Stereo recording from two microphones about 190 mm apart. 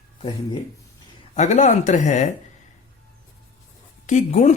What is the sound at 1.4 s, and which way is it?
Speech, 40° left (ahead or behind).